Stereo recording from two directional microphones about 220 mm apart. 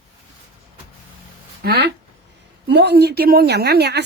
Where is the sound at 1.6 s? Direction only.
45° right (ahead or behind).